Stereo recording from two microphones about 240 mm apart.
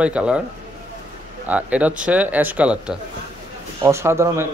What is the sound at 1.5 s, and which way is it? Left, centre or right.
Speech, centre.